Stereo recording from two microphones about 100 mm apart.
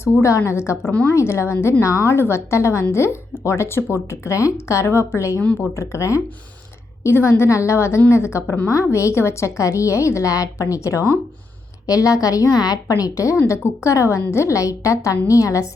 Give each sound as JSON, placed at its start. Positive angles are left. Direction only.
{"t": 0.0, "sound": "a woman's voice", "side_deg": 30}
{"t": 0.9, "sound": "a woman's voice", "side_deg": 15}
{"t": 1.1, "sound": "a woman's voice", "side_deg": 30}